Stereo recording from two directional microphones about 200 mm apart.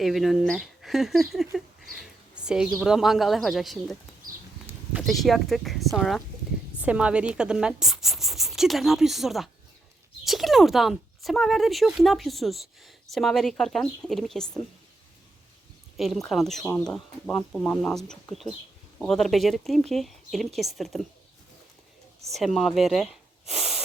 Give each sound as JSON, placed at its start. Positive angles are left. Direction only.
{"t": 0.0, "sound": "speech", "side_deg": 0}
{"t": 16.0, "sound": "speech", "side_deg": 0}
{"t": 22.3, "sound": "speech", "side_deg": 0}